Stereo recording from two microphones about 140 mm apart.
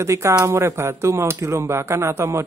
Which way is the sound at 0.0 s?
20° right (ahead or behind).